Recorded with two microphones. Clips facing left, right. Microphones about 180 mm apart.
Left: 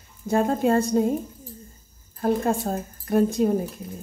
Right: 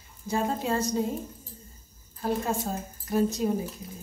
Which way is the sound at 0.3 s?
50° left (ahead or behind).